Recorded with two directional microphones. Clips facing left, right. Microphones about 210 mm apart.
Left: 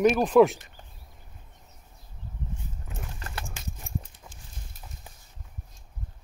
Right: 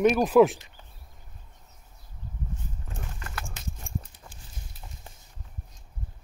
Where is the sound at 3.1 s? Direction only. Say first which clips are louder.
Left 1 dB; 35° left (ahead or behind).